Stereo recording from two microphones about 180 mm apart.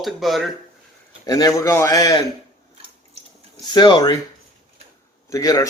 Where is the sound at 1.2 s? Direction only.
20° left (ahead or behind).